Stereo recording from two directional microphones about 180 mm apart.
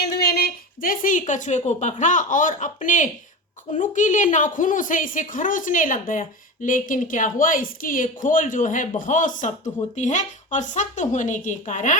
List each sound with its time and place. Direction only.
0.0 s a woman's voice: 60° left (ahead or behind); by 11.9 s 40° left (ahead or behind)